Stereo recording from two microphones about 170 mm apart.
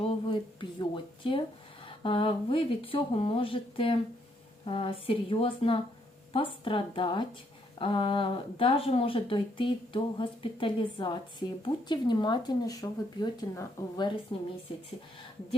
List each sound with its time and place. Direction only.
0.0 s speech: 30° left (ahead or behind)